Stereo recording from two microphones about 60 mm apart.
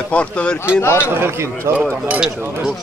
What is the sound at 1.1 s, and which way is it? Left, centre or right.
Speech, right.